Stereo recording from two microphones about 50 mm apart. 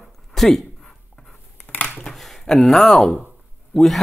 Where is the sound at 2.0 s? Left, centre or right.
Centre.